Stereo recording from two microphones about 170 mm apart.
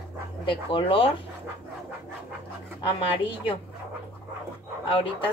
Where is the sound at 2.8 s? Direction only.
30° left (ahead or behind).